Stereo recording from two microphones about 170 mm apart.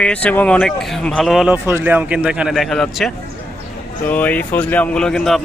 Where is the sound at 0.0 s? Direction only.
5° left (ahead or behind).